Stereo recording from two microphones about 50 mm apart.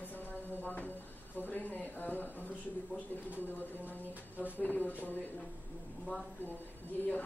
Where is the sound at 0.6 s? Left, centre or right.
Left.